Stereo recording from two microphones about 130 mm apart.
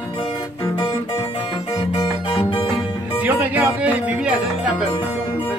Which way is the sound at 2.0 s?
40° left (ahead or behind).